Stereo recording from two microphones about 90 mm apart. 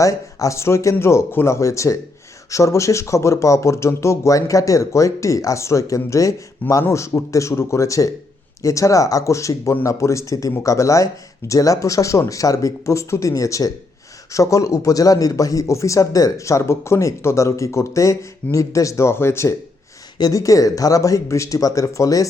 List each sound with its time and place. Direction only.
0.0 s speech: 40° left (ahead or behind)
20.1 s speech: 40° left (ahead or behind)